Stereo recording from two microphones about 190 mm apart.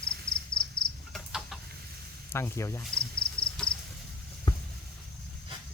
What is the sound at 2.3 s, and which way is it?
Speech, 15° left (ahead or behind).